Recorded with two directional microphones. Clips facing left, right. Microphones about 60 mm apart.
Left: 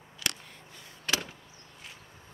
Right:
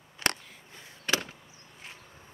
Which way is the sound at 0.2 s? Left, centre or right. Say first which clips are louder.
Right 5 dB; right.